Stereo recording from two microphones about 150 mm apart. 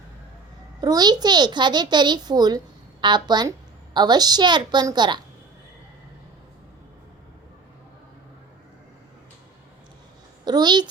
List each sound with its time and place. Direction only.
0.8 s a child's voice: 25° right (ahead or behind)
10.4 s speech: 30° right (ahead or behind)